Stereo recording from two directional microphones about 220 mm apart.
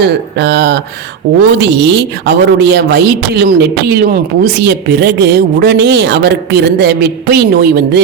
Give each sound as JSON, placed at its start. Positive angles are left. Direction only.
{"t": 0.0, "sound": "a woman's voice", "side_deg": -50}